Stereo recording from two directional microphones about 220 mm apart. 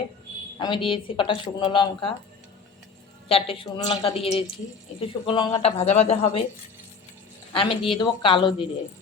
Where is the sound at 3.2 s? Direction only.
25° left (ahead or behind).